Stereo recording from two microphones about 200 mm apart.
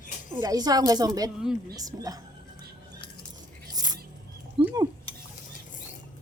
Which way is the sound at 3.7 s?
20° right (ahead or behind).